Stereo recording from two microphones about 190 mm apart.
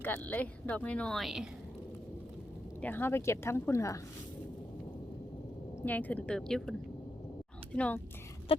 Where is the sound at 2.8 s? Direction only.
10° left (ahead or behind).